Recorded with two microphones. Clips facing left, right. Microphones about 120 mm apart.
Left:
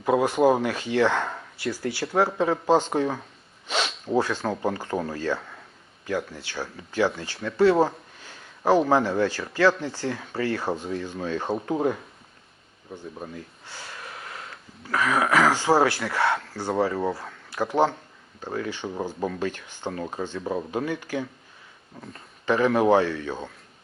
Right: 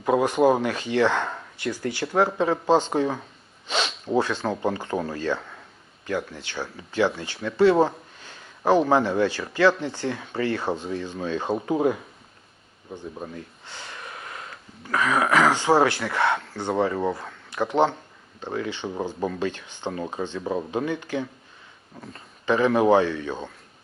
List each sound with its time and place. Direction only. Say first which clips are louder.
0.0 s speech: right 1 dB; centre (ahead or behind)
2.9 s speech: right 1 dB; centre (ahead or behind)
9.1 s speech: right 1 dB; 10° right (ahead or behind)
10.1 s speech: right 1 dB; centre (ahead or behind)
13.7 s a sound: right 1 dB; 5° left (ahead or behind)
14.8 s speech: right 1 dB; centre (ahead or behind)
19.4 s speech: right 1 dB; 20° right (ahead or behind)
20.7 s speech: right 1 dB; 15° right (ahead or behind)
22.4 s speech: right 1 dB; 10° right (ahead or behind)